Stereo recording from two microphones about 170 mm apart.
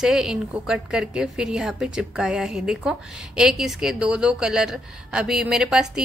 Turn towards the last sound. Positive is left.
turn(degrees=-5)  # may be behind; listen again after turning